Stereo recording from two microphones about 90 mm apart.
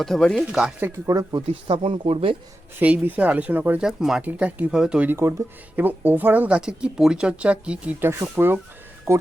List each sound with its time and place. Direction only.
0.0 s speech: 5° left (ahead or behind)
0.4 s speech: 10° right (ahead or behind)
0.9 s speech: 40° right (ahead or behind)
1.5 s speech: 85° right
2.7 s speech: 20° right (ahead or behind)
3.8 s speech: 5° right (ahead or behind)
4.2 s speech: 15° right (ahead or behind)
5.0 s speech: 30° right (ahead or behind); by 7.9 s 15° right (ahead or behind)
8.0 s speech: 25° right (ahead or behind)